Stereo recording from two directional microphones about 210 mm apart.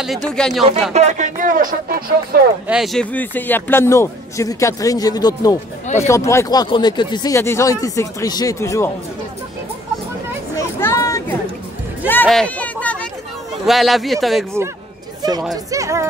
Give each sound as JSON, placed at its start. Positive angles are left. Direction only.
{"t": 0.0, "sound": "a man's voice", "side_deg": 0}
{"t": 0.9, "sound": "speech", "side_deg": -35}
{"t": 2.7, "sound": "a man's voice", "side_deg": 0}
{"t": 10.8, "sound": "a sound", "side_deg": 15}
{"t": 12.1, "sound": "a man's voice", "side_deg": 5}
{"t": 15.5, "sound": "speech", "side_deg": -15}